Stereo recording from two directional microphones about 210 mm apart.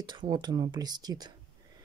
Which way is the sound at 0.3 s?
20° right (ahead or behind).